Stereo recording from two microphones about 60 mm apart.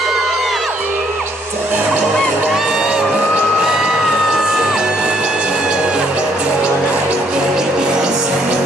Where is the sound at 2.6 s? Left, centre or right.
Centre.